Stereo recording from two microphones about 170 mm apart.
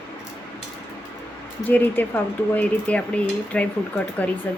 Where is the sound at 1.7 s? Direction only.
10° left (ahead or behind).